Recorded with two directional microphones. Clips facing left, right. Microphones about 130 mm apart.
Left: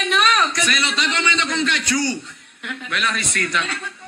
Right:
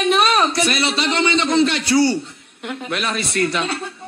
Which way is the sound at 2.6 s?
40° right (ahead or behind).